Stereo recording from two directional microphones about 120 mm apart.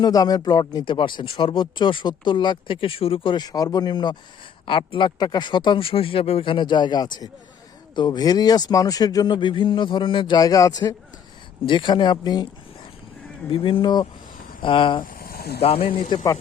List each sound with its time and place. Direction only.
0.0 s speech: 30° left (ahead or behind)
11.6 s speech: 45° left (ahead or behind)
13.5 s speech: 45° left (ahead or behind)